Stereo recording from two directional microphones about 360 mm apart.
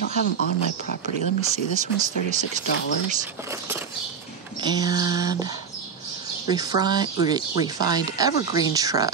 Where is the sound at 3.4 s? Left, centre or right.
Centre.